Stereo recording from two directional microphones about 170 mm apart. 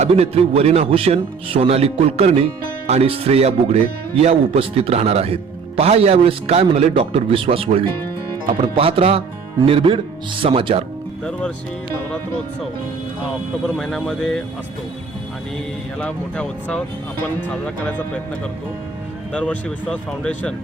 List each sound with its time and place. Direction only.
0.0 s a man's voice: 35° right (ahead or behind)
11.3 s speech: 5° left (ahead or behind)
13.7 s speech: centre (ahead or behind)
16.0 s speech: 5° left (ahead or behind)
19.3 s speech: 5° left (ahead or behind)